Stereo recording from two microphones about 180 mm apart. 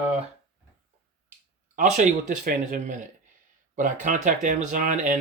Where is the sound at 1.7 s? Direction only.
40° right (ahead or behind).